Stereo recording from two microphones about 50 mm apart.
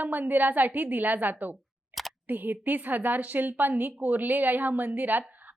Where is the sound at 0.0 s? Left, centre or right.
Right.